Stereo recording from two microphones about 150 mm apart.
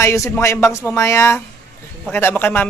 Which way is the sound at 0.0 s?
20° left (ahead or behind).